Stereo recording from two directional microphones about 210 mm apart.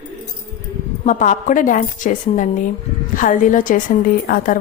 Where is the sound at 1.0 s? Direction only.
35° left (ahead or behind).